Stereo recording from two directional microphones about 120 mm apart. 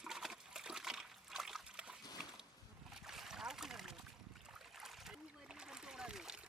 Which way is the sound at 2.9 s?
5° right (ahead or behind).